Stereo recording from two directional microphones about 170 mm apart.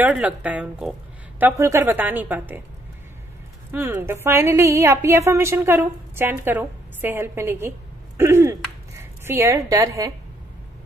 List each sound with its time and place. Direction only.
0.0 s a woman's voice: 5° right (ahead or behind)
3.7 s a woman's voice: 15° right (ahead or behind)